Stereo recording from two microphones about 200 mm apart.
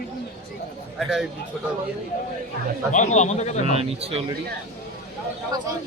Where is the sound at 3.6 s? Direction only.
30° right (ahead or behind).